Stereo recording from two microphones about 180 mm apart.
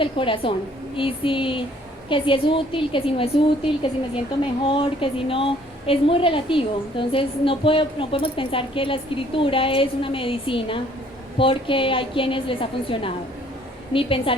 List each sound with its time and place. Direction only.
0.0 s a woman's voice: 30° left (ahead or behind)